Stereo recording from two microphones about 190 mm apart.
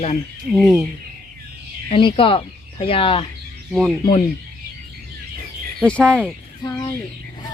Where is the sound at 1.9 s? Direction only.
30° left (ahead or behind).